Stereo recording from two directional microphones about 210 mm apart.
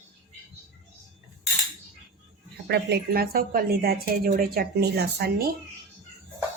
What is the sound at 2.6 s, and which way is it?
A woman's voice, 50° right (ahead or behind).